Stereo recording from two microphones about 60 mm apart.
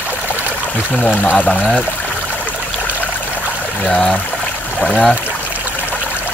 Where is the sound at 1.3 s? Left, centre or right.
Centre.